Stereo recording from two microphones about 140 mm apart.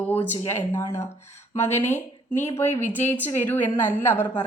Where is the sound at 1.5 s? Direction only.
15° left (ahead or behind).